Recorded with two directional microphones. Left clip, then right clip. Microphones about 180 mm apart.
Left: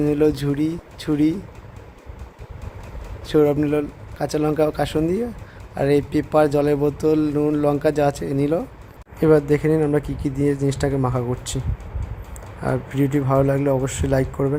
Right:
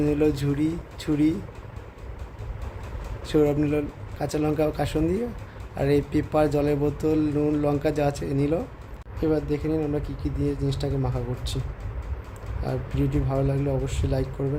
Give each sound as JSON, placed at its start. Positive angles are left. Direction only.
{"t": 0.0, "sound": "speech", "side_deg": 25}
{"t": 3.2, "sound": "speech", "side_deg": 25}
{"t": 12.6, "sound": "speech", "side_deg": 35}